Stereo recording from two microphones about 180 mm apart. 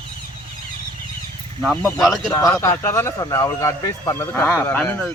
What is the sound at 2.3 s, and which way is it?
Speech, 20° left (ahead or behind).